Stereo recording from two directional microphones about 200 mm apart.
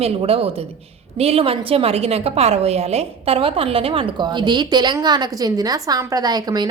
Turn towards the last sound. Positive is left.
turn(degrees=-20)  # may be behind; listen again after turning